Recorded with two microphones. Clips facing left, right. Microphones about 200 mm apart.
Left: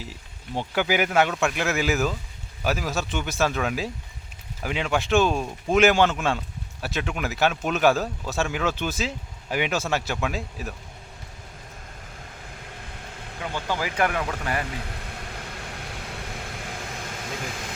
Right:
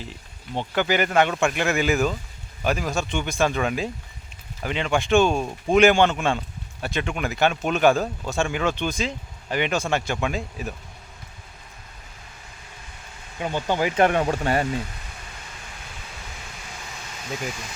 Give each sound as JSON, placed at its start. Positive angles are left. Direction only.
{"t": 0.7, "sound": "speech", "side_deg": 10}
{"t": 13.4, "sound": "speech", "side_deg": -20}
{"t": 14.8, "sound": "a sound", "side_deg": 60}